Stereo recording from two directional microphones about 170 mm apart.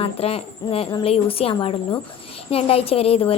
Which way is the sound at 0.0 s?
35° left (ahead or behind).